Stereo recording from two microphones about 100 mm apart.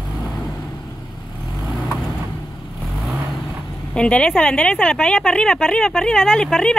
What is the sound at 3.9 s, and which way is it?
Speech, 10° left (ahead or behind).